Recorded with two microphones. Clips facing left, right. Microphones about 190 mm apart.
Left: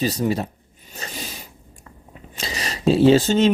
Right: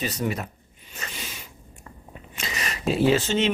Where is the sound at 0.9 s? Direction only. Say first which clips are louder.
Left 4 dB; 35° left (ahead or behind).